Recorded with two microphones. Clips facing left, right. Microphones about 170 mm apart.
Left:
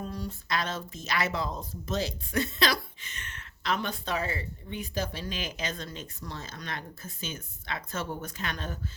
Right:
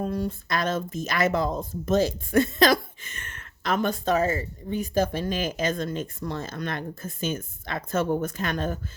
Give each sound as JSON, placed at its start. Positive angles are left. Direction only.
{"t": 0.0, "sound": "speech", "side_deg": -55}